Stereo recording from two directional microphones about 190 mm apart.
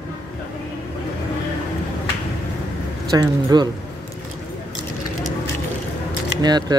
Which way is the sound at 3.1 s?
20° right (ahead or behind).